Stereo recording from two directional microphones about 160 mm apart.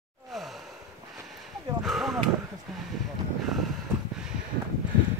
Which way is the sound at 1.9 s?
Centre (ahead or behind).